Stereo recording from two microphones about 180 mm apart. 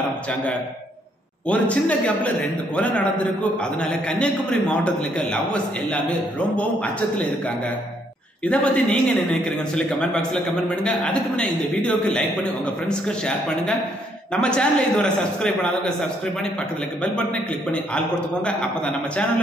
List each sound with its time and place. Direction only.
1.5 s a man's voice: 5° left (ahead or behind)
17.9 s a man's voice: 5° left (ahead or behind)